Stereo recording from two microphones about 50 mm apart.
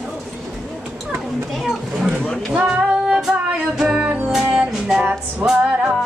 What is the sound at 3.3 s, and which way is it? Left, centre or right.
Music, centre.